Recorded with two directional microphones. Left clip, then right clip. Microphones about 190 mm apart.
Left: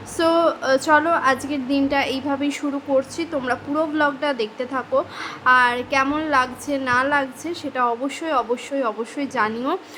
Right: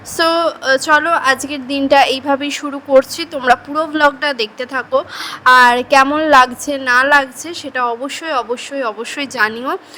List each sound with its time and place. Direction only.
0.2 s a woman's voice: 40° right (ahead or behind)